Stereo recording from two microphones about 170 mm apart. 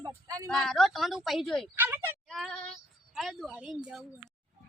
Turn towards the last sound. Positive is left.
turn(degrees=-5)  # may be behind; listen again after turning